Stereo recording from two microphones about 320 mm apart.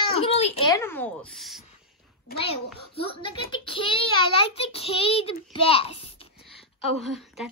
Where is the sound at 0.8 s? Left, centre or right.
Centre.